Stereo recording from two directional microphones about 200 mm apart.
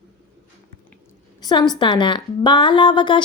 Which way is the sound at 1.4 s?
20° left (ahead or behind).